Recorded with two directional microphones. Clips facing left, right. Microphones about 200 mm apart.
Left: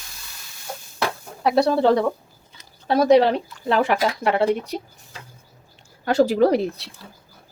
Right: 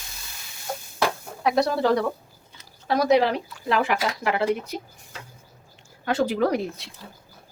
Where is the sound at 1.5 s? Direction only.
30° left (ahead or behind).